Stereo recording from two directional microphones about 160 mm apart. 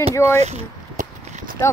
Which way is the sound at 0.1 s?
20° left (ahead or behind).